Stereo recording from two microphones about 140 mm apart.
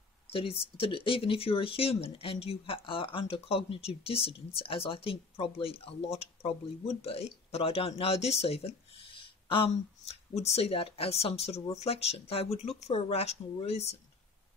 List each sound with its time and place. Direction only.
0.7 s speech: 40° left (ahead or behind)